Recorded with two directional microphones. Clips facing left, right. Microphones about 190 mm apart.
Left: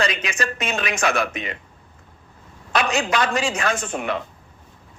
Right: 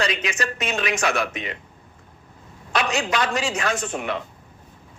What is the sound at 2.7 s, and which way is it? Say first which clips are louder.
A man's voice: left 2 dB; 50° left (ahead or behind).